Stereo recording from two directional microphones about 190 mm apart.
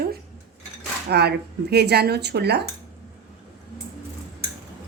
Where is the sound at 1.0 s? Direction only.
60° right (ahead or behind).